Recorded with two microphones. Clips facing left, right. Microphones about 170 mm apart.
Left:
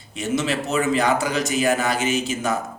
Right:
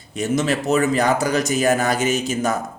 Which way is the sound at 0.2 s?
45° right (ahead or behind).